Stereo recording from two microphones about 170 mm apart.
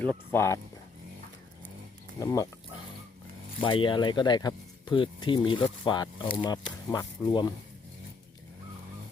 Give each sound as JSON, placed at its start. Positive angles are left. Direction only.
{"t": 0.0, "sound": "speech", "side_deg": 10}
{"t": 2.1, "sound": "speech", "side_deg": 20}
{"t": 3.6, "sound": "speech", "side_deg": 30}